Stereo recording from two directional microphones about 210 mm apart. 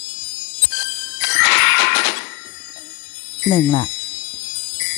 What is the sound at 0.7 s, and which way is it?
Music, 55° left (ahead or behind).